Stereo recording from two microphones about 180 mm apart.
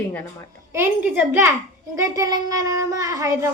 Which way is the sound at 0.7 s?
10° right (ahead or behind).